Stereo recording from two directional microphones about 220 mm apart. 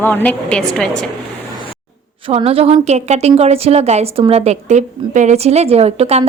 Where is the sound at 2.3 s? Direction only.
25° right (ahead or behind).